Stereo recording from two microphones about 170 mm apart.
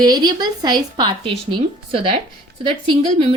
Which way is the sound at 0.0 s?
25° right (ahead or behind).